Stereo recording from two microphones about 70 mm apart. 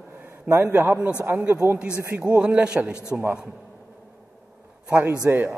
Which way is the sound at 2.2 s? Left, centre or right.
Centre.